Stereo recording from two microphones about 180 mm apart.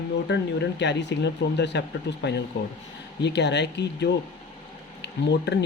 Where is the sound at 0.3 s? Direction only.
75° left (ahead or behind).